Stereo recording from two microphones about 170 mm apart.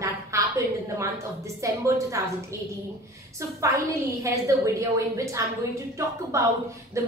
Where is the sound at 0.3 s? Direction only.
15° right (ahead or behind).